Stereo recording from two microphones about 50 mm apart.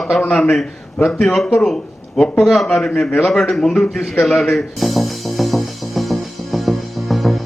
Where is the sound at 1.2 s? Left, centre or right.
Centre.